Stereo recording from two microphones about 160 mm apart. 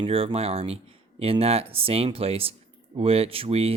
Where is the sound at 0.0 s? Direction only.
35° right (ahead or behind).